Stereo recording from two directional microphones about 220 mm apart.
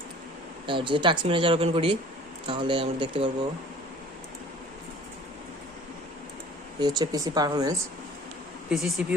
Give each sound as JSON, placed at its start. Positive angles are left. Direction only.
{"t": 0.7, "sound": "speech", "side_deg": -20}
{"t": 6.7, "sound": "speech", "side_deg": -20}
{"t": 8.7, "sound": "speech", "side_deg": 0}